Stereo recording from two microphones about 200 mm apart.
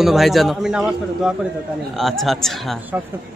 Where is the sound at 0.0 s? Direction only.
Centre (ahead or behind).